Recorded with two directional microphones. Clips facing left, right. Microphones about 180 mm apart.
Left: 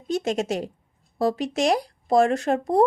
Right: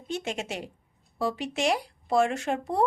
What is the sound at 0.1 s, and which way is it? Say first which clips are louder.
Speech: left 8 dB; 40° left (ahead or behind).